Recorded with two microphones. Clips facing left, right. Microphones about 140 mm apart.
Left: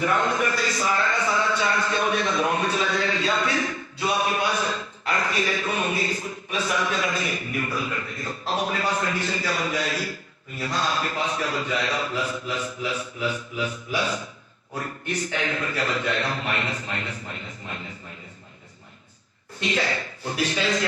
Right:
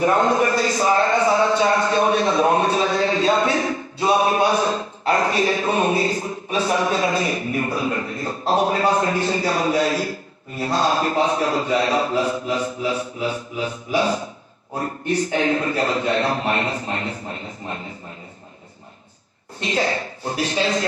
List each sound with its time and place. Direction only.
0.0 s a sound: 35° right (ahead or behind)
10.6 s a man's voice: 35° right (ahead or behind)
19.6 s a man's voice: 35° right (ahead or behind)